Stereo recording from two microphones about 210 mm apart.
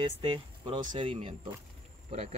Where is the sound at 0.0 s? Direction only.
25° right (ahead or behind).